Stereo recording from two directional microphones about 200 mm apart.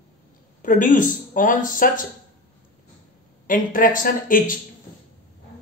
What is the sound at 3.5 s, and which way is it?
Speech, 40° left (ahead or behind).